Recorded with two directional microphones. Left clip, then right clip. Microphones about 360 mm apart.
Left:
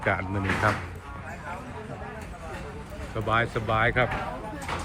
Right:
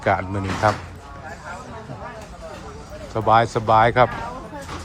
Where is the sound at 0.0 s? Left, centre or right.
Centre.